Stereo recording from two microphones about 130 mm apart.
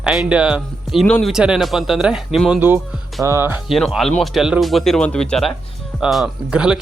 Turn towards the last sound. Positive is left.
turn(degrees=-5)  # may be behind; listen again after turning